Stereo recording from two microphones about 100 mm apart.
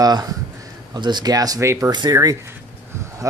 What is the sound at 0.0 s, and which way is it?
Speech, 40° right (ahead or behind).